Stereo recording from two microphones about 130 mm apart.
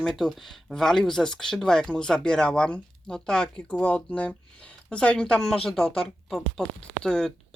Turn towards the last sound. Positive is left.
turn(degrees=5)  # may be behind; listen again after turning